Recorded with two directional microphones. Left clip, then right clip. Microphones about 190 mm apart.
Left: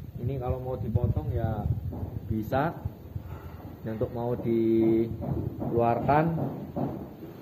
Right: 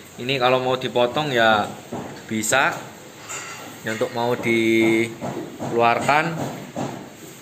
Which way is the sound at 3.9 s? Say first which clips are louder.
Right 9 dB; 25° right (ahead or behind).